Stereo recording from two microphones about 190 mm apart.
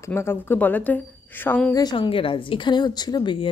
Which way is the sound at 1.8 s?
25° left (ahead or behind).